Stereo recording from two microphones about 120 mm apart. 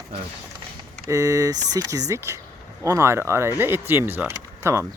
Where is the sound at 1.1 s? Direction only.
25° right (ahead or behind).